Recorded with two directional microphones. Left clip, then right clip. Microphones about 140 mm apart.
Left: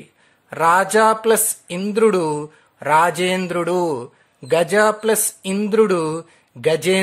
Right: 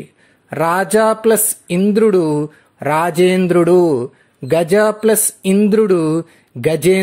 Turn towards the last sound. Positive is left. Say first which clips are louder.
# right 3 dB
turn(degrees=-25)  # may be behind; listen again after turning